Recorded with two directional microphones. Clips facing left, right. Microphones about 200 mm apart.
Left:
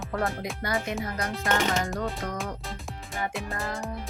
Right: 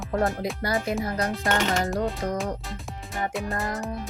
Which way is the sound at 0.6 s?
35° right (ahead or behind).